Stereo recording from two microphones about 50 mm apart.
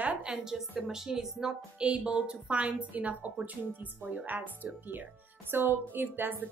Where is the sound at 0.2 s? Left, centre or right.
Centre; by 4.8 s right.